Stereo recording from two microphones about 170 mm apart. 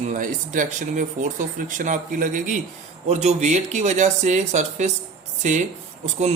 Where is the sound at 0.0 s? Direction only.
45° right (ahead or behind).